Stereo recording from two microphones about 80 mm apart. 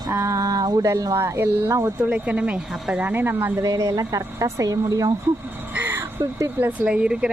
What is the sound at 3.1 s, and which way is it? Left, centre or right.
Speech, right.